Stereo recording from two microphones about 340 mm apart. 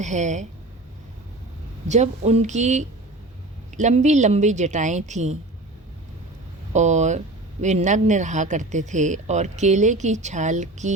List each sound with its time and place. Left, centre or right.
0.0 s speech: right
1.9 s speech: centre
6.7 s speech: centre